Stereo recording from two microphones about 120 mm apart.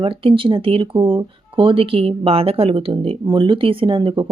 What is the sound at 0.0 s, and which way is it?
Speech, 50° right (ahead or behind).